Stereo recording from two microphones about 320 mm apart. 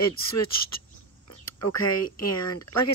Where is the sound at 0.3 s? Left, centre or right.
Left.